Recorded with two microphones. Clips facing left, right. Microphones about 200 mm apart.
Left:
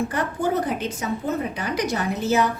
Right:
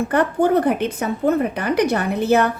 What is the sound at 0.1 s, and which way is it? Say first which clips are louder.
A woman's voice: right 7 dB; 60° right (ahead or behind).